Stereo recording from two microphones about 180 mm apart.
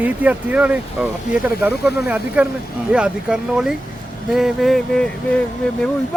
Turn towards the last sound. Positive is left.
turn(degrees=5)  # may be behind; listen again after turning